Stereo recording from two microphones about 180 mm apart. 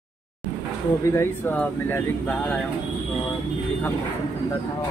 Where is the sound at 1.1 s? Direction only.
10° left (ahead or behind).